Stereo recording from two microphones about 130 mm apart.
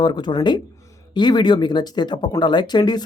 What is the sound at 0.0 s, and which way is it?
Speech, 35° left (ahead or behind).